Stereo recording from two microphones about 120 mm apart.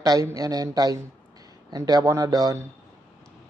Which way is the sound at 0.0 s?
30° right (ahead or behind).